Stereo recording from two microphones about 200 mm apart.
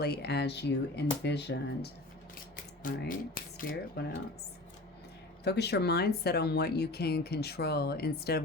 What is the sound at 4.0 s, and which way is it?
Speech, 55° left (ahead or behind).